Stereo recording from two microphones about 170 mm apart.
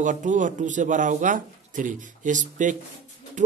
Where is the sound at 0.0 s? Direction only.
50° right (ahead or behind).